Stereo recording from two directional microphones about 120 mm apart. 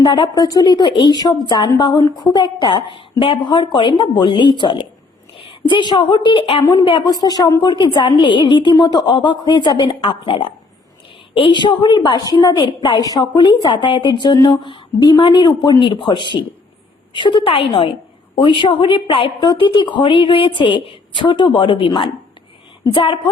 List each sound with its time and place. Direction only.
0.0 s a woman's voice: 40° left (ahead or behind)